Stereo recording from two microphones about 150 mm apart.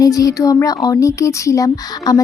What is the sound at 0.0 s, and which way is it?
Speech, 25° left (ahead or behind).